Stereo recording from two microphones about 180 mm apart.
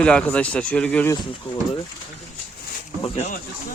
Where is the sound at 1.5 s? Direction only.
30° left (ahead or behind).